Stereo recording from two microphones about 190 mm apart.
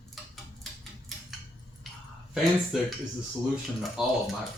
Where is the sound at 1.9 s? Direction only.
Centre (ahead or behind).